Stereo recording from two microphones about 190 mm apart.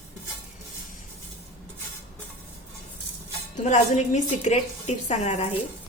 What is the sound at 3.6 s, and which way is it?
A woman's voice, 40° left (ahead or behind).